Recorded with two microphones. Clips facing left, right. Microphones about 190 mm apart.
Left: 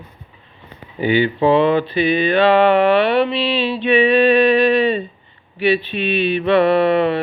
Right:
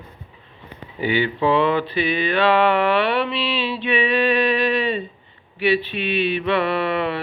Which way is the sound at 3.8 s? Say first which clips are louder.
Left 7 dB; 30° left (ahead or behind).